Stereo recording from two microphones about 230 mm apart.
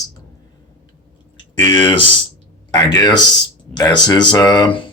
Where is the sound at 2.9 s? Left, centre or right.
Centre.